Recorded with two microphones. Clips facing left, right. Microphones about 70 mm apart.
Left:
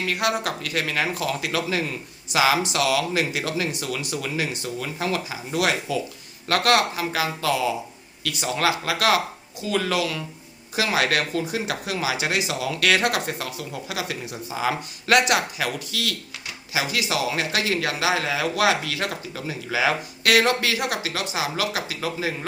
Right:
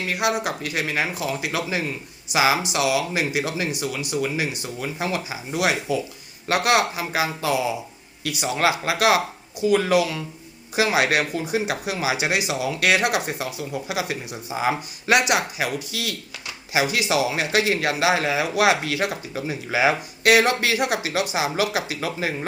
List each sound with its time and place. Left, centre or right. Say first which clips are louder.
0.1 s speech: right 2 dB; centre
16.7 s a man's voice: right 4 dB; right
18.3 s speech: right 2 dB; right